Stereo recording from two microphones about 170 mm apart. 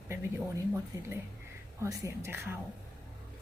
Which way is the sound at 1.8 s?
20° right (ahead or behind).